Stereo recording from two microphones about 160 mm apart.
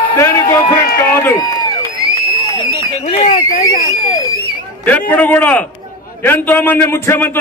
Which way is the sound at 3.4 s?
70° left (ahead or behind).